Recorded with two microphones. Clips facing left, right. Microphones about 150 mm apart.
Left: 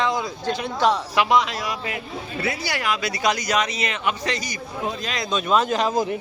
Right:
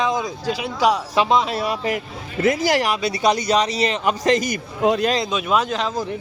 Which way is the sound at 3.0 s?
30° right (ahead or behind).